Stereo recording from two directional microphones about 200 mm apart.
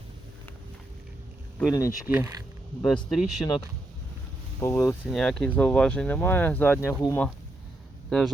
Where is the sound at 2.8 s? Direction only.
Centre (ahead or behind).